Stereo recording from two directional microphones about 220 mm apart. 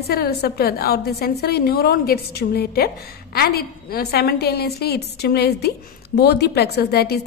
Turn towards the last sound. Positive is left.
turn(degrees=45)  # may be behind; listen again after turning